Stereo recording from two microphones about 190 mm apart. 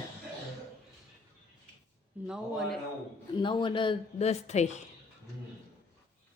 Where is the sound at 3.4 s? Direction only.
25° left (ahead or behind).